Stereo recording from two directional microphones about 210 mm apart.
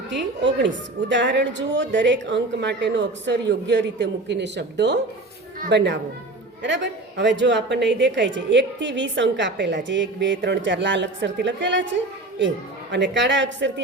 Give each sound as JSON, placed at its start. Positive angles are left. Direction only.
{"t": 0.1, "sound": "a woman's voice", "side_deg": -55}
{"t": 12.9, "sound": "a woman's voice", "side_deg": -60}